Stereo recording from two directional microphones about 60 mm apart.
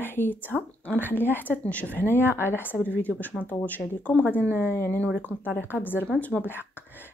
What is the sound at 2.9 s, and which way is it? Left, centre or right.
Speech, left.